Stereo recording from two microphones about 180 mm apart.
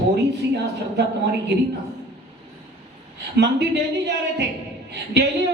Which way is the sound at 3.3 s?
70° right (ahead or behind).